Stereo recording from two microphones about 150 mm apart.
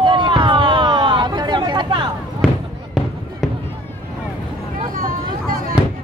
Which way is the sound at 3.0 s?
Centre (ahead or behind).